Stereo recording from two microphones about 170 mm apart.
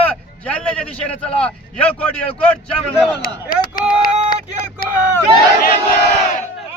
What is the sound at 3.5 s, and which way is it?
Speech, 60° left (ahead or behind).